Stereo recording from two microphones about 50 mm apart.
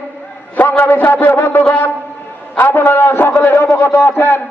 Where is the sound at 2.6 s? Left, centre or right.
Left.